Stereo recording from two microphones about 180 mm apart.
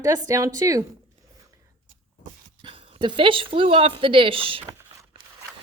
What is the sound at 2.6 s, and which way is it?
Speech, 30° right (ahead or behind).